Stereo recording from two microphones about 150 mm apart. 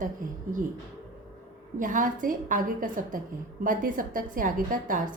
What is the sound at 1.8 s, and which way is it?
A woman's voice, 60° right (ahead or behind).